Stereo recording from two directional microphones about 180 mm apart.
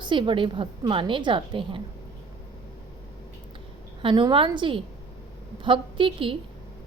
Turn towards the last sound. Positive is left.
turn(degrees=-30)  # may be behind; listen again after turning